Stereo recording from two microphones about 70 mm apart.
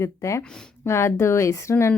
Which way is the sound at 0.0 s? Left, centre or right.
Left.